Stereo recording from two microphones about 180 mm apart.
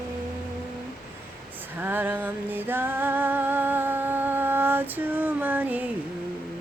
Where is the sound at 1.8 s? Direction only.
10° right (ahead or behind).